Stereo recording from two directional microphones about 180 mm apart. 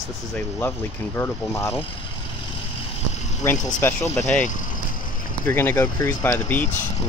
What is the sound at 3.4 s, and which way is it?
Speech, 15° left (ahead or behind).